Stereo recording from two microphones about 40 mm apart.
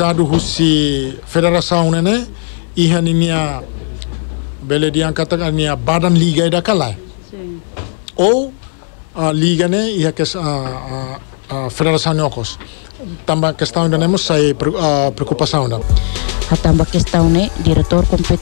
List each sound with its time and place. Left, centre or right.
0.0 s a man's voice: centre
4.6 s a man's voice: right
7.7 s a sound: right
9.1 s a man's voice: centre